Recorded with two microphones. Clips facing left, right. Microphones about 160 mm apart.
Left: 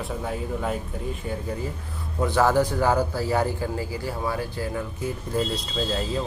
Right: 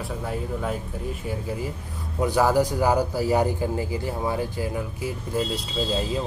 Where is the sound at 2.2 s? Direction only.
15° right (ahead or behind).